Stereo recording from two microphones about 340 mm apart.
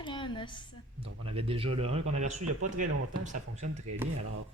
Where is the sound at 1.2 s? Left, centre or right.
Centre.